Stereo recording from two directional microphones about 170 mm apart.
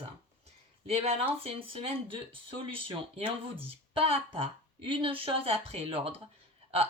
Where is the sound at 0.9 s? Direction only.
35° right (ahead or behind).